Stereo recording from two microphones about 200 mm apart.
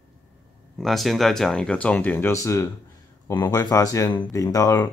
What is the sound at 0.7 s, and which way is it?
Speech, centre (ahead or behind).